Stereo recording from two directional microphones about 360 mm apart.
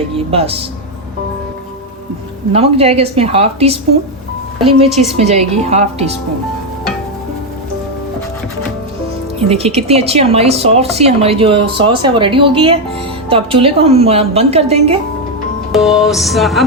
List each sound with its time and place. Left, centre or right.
0.3 s speech: centre
2.5 s speech: centre
5.1 s speech: centre
9.5 s speech: centre
15.7 s music: centre